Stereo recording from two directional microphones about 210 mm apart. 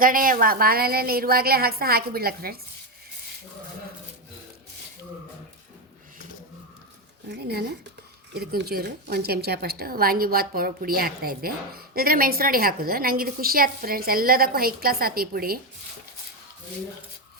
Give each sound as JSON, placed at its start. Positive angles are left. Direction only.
{"t": 0.0, "sound": "a woman's voice", "side_deg": -40}
{"t": 7.3, "sound": "a woman's voice", "side_deg": -50}